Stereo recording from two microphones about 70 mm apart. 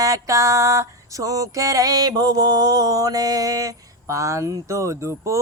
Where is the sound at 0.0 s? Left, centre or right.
Right.